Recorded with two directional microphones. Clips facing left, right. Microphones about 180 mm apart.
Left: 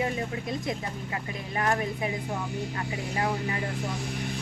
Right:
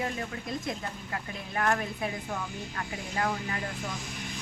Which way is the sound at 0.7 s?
10° left (ahead or behind).